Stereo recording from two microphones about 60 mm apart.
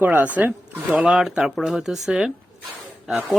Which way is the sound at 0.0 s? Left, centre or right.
Right.